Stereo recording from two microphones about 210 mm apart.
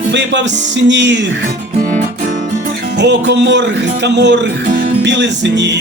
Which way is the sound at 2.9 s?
55° right (ahead or behind).